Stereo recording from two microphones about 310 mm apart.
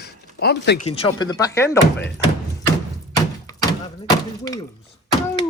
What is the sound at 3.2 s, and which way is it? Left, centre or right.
Thunk, centre.